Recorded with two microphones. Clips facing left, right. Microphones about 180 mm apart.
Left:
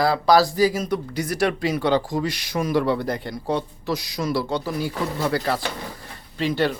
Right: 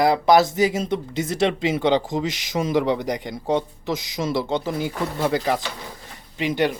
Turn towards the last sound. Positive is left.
turn(degrees=-15)  # may be behind; listen again after turning